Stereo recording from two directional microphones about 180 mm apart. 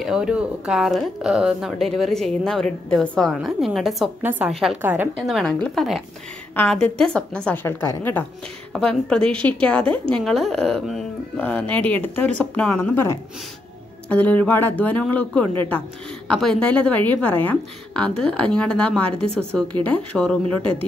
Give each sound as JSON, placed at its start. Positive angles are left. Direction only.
{"t": 0.0, "sound": "a woman's voice", "side_deg": -5}